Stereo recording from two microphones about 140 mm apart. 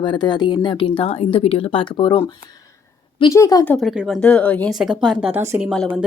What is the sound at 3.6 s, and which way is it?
Speech, 10° left (ahead or behind).